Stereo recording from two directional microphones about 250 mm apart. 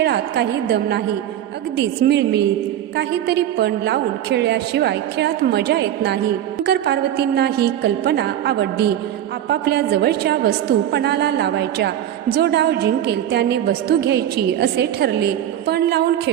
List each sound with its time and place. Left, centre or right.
0.0 s a woman's voice: right